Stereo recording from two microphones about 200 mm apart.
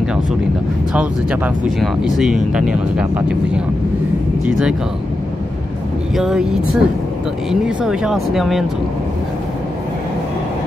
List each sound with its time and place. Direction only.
0.9 s speech: 5° right (ahead or behind)
6.1 s speech: centre (ahead or behind)